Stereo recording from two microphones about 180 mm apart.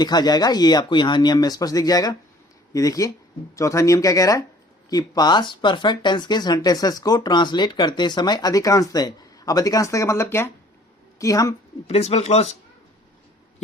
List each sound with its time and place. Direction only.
0.0 s speech: 25° left (ahead or behind)
11.9 s speech: 35° left (ahead or behind)